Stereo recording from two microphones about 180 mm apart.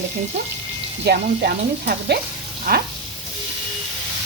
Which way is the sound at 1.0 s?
60° right (ahead or behind).